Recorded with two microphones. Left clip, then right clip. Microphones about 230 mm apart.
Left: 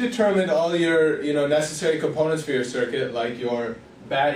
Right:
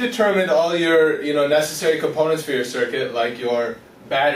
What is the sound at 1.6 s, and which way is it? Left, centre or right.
Speech, right.